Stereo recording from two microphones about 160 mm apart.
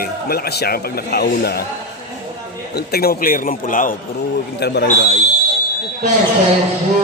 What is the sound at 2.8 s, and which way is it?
A man's voice, 75° left (ahead or behind).